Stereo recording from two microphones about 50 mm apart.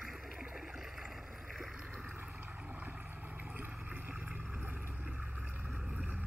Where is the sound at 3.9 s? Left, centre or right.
Right.